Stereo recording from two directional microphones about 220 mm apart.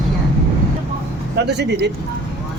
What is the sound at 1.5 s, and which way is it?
Speech, 50° right (ahead or behind).